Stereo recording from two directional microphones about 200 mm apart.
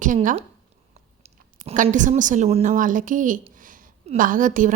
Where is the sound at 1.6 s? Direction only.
35° right (ahead or behind).